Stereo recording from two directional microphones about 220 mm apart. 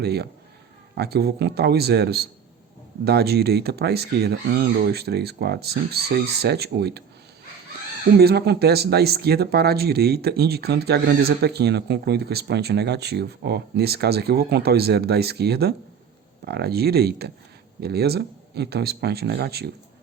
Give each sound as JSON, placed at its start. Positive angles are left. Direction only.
{"t": 0.0, "sound": "speech", "side_deg": -45}
{"t": 8.2, "sound": "speech", "side_deg": -45}